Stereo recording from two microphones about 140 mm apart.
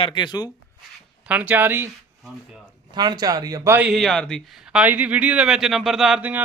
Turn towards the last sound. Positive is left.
turn(degrees=-10)  # may be behind; listen again after turning